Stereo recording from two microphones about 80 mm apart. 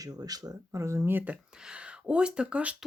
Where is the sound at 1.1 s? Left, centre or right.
Centre.